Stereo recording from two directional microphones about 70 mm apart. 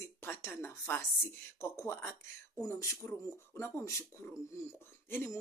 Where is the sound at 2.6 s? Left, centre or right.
Left.